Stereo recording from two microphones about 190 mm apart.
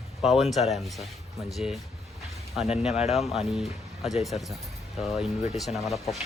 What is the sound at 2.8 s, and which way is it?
Speech, 5° right (ahead or behind).